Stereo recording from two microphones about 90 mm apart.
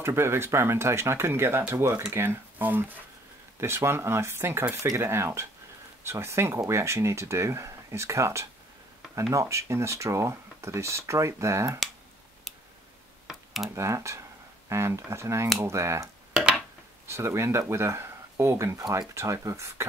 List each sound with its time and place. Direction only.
0.0 s speech: 30° right (ahead or behind)
13.3 s computer keyboard: 5° right (ahead or behind)
13.7 s speech: 35° right (ahead or behind)
17.1 s speech: 30° right (ahead or behind)